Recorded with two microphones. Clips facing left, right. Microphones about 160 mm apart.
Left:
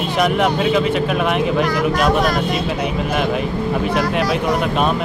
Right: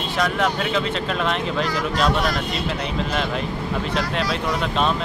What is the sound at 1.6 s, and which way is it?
Speech, 55° left (ahead or behind).